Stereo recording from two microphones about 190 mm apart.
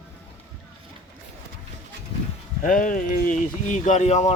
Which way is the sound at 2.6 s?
45° left (ahead or behind).